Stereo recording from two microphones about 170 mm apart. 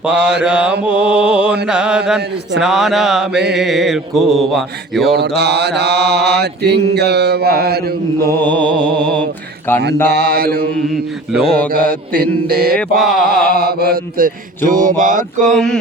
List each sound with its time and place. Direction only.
0.0 s mantra: 5° right (ahead or behind)
5.0 s mantra: 75° right (ahead or behind)
8.3 s music: 10° left (ahead or behind)
9.0 s mantra: 5° left (ahead or behind)
10.1 s mantra: 75° right (ahead or behind)
10.8 s mantra: centre (ahead or behind)
11.7 s mantra: 60° right (ahead or behind)
13.0 s mantra: centre (ahead or behind)
13.6 s mantra: 65° right (ahead or behind); by 15.4 s 50° right (ahead or behind)
15.4 s mantra: 5° left (ahead or behind)